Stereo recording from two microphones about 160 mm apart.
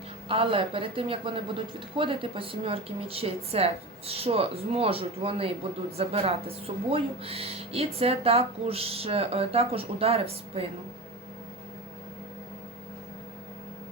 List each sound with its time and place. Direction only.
0.3 s speech: 35° right (ahead or behind)